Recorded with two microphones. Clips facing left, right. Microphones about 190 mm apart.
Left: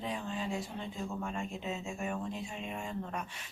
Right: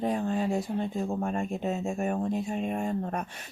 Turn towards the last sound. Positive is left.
turn(degrees=-45)  # may be behind; listen again after turning